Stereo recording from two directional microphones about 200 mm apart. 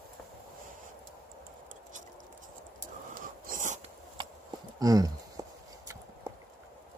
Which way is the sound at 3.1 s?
45° right (ahead or behind).